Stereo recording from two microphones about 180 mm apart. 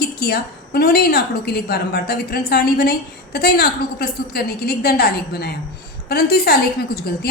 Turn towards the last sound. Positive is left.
turn(degrees=60)  # may be behind; listen again after turning